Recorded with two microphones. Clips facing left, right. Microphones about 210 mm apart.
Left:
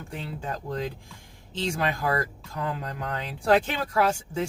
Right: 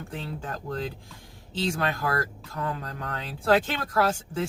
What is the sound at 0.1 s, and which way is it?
Speech, 15° left (ahead or behind).